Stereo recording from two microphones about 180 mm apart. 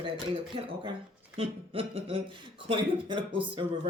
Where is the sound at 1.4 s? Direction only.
30° right (ahead or behind).